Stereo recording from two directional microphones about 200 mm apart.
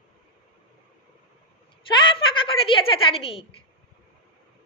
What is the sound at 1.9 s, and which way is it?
A woman's voice, 25° left (ahead or behind).